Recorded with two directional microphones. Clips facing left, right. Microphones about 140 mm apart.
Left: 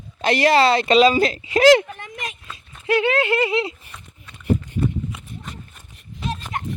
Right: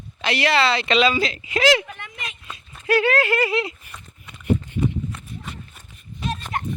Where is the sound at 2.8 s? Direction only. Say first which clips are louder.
Even; 20° left (ahead or behind).